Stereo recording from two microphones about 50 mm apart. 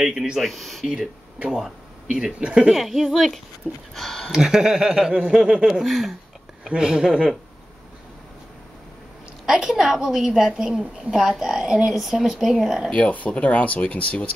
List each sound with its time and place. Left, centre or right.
0.0 s a woman's voice: centre
0.4 s speech: centre
0.8 s speech: centre
2.7 s a woman's voice: centre
3.9 s speech: centre
4.3 s a woman's voice: centre
9.5 s a woman's voice: centre
12.9 s speech: left